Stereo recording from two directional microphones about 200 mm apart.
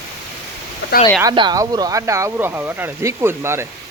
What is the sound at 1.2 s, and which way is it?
Speech, 20° right (ahead or behind).